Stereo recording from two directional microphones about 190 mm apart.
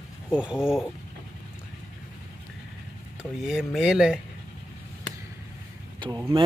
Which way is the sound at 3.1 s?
5° right (ahead or behind).